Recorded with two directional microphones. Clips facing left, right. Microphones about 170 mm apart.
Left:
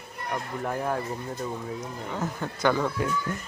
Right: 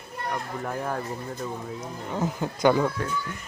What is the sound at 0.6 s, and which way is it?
Speech, 5° left (ahead or behind).